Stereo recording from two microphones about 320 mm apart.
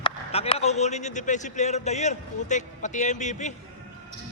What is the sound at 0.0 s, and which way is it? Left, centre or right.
A man's voice, centre.